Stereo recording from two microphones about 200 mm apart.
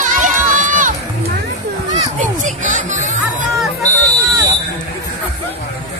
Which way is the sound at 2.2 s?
40° right (ahead or behind).